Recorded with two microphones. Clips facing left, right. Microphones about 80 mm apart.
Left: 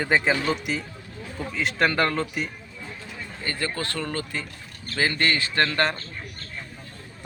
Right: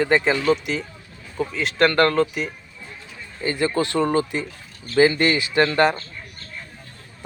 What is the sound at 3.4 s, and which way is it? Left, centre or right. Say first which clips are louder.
Speech: right 8 dB; centre.